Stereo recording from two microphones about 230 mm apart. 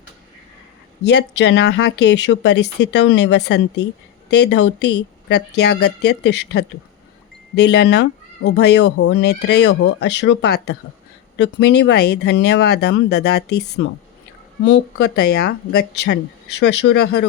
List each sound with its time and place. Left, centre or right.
1.0 s speech: left